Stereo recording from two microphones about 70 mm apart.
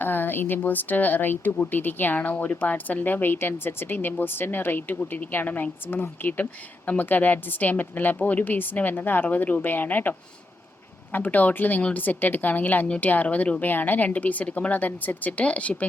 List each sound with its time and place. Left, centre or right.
0.0 s speech: left